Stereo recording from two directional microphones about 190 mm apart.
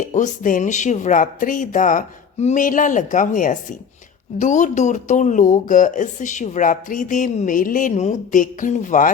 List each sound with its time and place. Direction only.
0.0 s speech: 40° left (ahead or behind)